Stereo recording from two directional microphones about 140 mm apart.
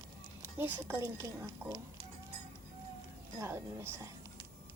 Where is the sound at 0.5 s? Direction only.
15° right (ahead or behind).